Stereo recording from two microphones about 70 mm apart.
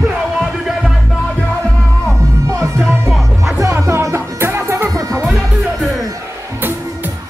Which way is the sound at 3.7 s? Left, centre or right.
Right.